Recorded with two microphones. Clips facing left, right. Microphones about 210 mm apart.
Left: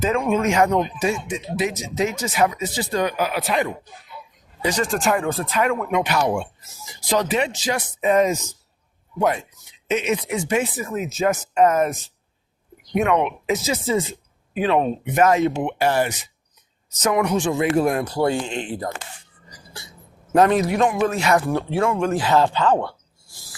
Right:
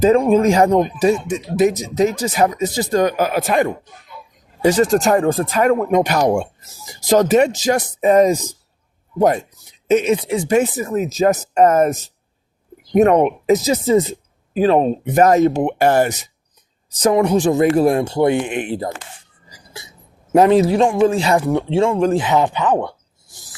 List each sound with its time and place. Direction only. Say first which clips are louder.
0.0 s speech: right 8 dB; 35° right (ahead or behind)
4.7 s speech: right 7 dB; 40° right (ahead or behind)
10.6 s speech: right 6 dB; 40° right (ahead or behind); by 18.9 s 25° right (ahead or behind)
20.5 s speech: right 6 dB; 30° right (ahead or behind)
22.2 s speech: right 1 dB; 20° right (ahead or behind)